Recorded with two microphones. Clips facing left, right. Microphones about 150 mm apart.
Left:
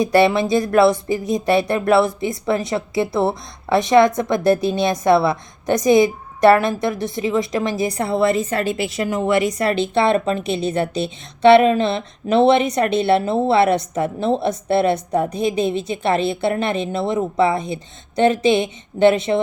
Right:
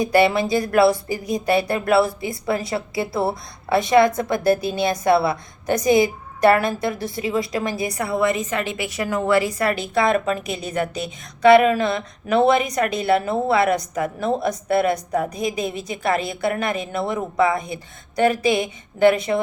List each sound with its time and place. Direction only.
0.0 s a woman's voice: 20° left (ahead or behind)